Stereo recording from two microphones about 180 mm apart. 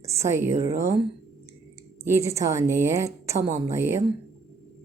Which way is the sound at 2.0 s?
15° right (ahead or behind).